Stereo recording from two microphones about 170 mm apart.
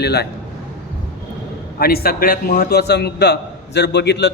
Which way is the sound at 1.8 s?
65° left (ahead or behind).